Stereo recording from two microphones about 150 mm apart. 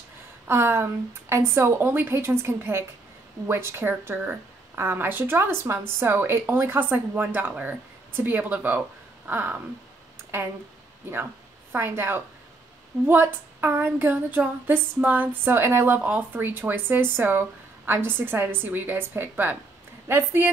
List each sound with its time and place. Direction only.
0.5 s speech: 15° right (ahead or behind)
11.7 s speech: 15° right (ahead or behind)